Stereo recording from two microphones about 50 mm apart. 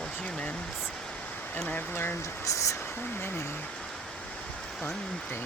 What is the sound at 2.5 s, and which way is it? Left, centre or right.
Speech, left.